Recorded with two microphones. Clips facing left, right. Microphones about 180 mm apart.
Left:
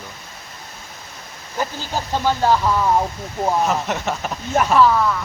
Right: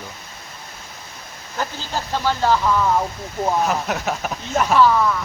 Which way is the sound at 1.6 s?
15° left (ahead or behind).